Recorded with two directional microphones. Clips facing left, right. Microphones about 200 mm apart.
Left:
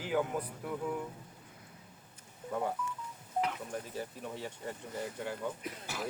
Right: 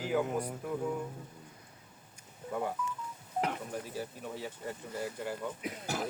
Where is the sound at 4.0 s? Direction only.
Centre (ahead or behind).